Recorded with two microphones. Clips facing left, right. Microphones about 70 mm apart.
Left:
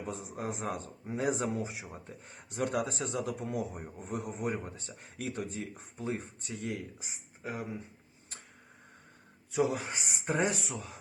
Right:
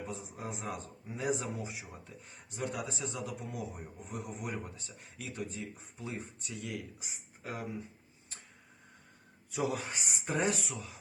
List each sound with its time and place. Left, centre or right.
0.1 s speech: left
9.5 s speech: left
10.8 s speech: left